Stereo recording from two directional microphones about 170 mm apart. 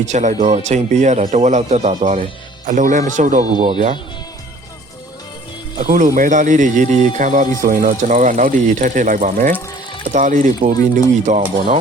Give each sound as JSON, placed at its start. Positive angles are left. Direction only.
{"t": 0.0, "sound": "speech", "side_deg": -45}
{"t": 5.8, "sound": "speech", "side_deg": -50}